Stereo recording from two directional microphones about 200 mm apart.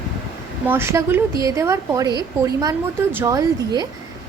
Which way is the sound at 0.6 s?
10° right (ahead or behind).